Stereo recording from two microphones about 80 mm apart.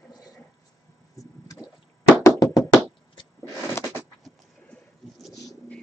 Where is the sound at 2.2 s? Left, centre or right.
Left.